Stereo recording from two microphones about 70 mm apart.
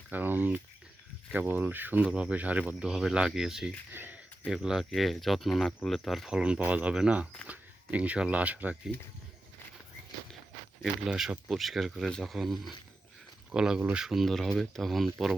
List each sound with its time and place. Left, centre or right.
0.1 s speech: right
2.0 s speech: centre
2.9 s speech: centre
3.9 s a sound: right
4.4 s speech: centre
11.1 s speech: centre
11.4 s speech: centre
13.5 s speech: centre